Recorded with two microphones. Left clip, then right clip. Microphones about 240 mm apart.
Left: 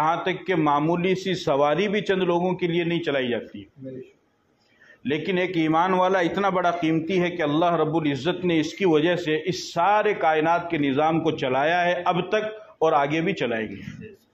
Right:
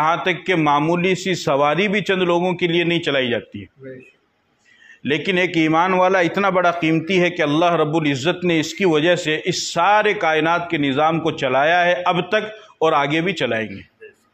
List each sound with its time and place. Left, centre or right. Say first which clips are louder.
0.0 s a man's voice: right 5 dB; right
5.0 s a man's voice: right 6 dB; right